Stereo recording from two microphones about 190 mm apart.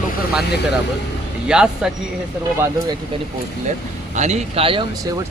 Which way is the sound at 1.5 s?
5° right (ahead or behind).